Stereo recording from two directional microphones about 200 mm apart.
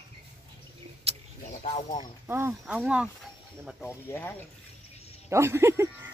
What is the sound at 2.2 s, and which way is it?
Speech, 10° right (ahead or behind).